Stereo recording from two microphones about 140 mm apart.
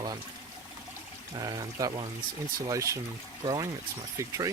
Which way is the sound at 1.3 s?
25° right (ahead or behind).